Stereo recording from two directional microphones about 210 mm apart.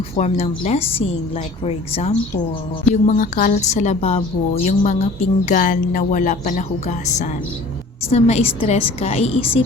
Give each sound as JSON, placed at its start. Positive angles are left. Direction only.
{"t": 0.2, "sound": "a woman's voice", "side_deg": 30}